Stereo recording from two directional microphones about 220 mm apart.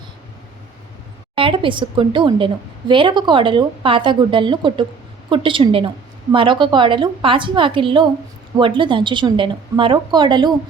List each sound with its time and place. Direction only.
1.4 s a woman's voice: 25° right (ahead or behind)